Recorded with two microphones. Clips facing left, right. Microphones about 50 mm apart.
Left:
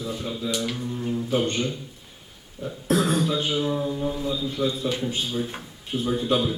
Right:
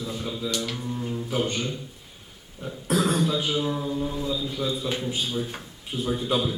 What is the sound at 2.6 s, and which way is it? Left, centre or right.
Speech, centre.